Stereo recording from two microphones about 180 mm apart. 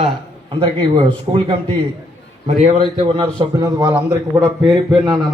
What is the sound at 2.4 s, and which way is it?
Speech, 40° right (ahead or behind).